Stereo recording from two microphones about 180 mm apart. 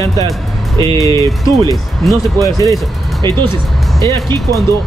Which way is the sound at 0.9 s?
20° left (ahead or behind).